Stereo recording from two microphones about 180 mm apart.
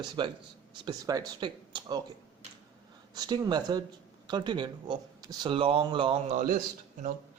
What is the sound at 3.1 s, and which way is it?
Speech, 25° right (ahead or behind).